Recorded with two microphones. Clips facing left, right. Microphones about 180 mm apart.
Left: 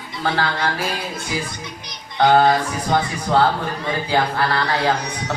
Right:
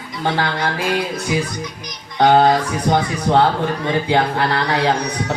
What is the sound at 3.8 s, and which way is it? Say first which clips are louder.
Speech: right 2 dB; 20° right (ahead or behind).